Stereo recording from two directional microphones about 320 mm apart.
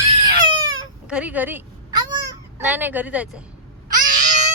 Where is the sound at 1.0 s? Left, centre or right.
Centre.